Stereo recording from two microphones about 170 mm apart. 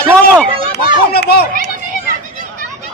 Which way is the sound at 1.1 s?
70° left (ahead or behind).